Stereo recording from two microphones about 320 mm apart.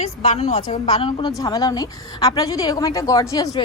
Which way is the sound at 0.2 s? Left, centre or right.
Centre.